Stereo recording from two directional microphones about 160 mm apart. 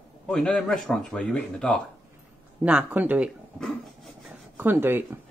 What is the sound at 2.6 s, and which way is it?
Speech, 10° right (ahead or behind).